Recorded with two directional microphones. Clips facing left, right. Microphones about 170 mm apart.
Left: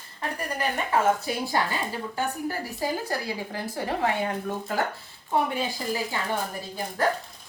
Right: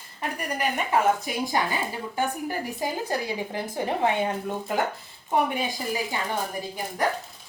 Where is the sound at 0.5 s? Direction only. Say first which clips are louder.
Right 1 dB; 15° right (ahead or behind).